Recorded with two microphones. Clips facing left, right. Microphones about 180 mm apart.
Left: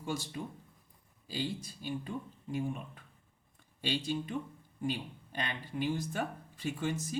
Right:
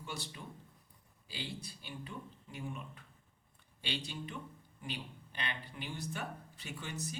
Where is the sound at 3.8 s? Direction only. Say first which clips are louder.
Left 8 dB; 45° left (ahead or behind).